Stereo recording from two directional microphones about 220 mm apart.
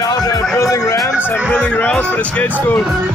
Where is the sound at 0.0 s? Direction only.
15° left (ahead or behind).